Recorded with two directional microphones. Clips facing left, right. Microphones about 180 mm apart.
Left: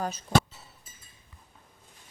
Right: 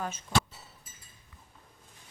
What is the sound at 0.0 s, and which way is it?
Speech, 35° left (ahead or behind).